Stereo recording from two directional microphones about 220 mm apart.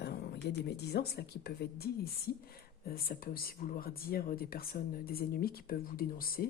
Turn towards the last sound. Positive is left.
turn(degrees=40)  # may be behind; listen again after turning